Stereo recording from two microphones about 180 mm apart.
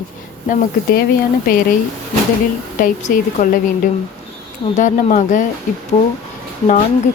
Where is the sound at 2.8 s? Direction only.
45° left (ahead or behind).